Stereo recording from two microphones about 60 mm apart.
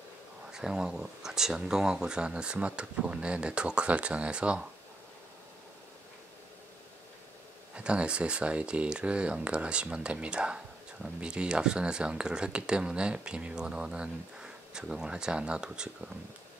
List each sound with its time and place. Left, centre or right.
0.5 s speech: centre
7.7 s speech: centre